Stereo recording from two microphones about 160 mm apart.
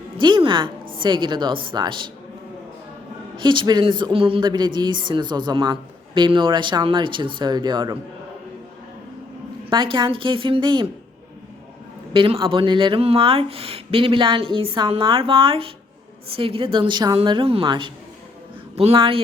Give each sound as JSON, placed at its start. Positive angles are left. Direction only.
{"t": 0.2, "sound": "speech", "side_deg": -30}
{"t": 3.3, "sound": "speech", "side_deg": -30}
{"t": 9.6, "sound": "speech", "side_deg": -30}
{"t": 12.1, "sound": "speech", "side_deg": -35}